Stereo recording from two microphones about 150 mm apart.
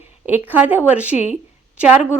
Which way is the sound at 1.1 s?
50° left (ahead or behind).